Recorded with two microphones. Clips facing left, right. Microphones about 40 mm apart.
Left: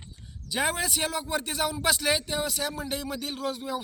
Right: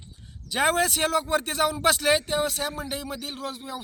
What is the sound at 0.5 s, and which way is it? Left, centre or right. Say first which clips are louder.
Speech: right 5 dB; right.